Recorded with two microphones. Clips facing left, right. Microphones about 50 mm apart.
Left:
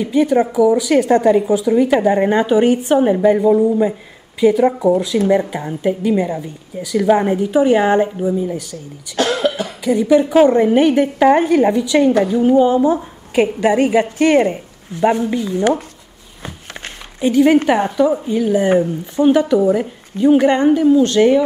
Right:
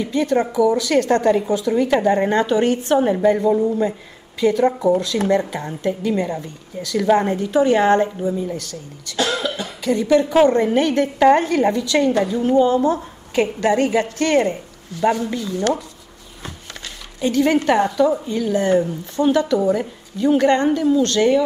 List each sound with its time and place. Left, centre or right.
0.0 s a woman's voice: centre
9.1 s cough: left
9.8 s a woman's voice: centre
17.2 s a woman's voice: centre